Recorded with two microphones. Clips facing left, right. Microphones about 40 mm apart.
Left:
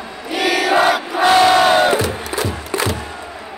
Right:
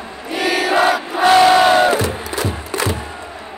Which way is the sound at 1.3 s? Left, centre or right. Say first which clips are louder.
Right 1 dB; centre.